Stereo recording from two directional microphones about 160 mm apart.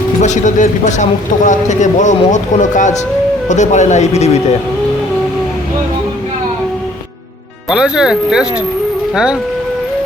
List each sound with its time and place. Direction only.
0.2 s speech: 50° left (ahead or behind)
7.7 s speech: 5° right (ahead or behind)